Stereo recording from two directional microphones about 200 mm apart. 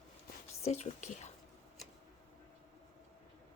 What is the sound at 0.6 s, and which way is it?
Speech, 35° left (ahead or behind).